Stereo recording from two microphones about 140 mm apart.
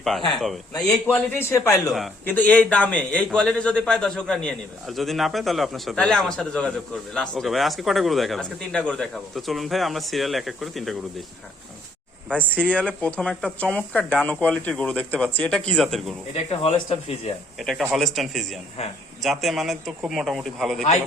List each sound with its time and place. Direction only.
1.0 s a man's voice: 15° left (ahead or behind); by 10.9 s centre (ahead or behind)
12.3 s a man's voice: 10° left (ahead or behind)
16.3 s speech: 45° left (ahead or behind)
17.6 s a man's voice: centre (ahead or behind)